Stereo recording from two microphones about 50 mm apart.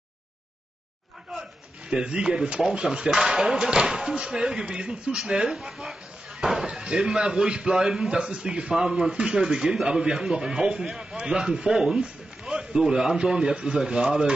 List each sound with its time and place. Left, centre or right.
2.0 s a man's voice: right
5.5 s a sound: centre
6.6 s slam: centre
7.1 s a man's voice: centre
7.7 s a man's voice: centre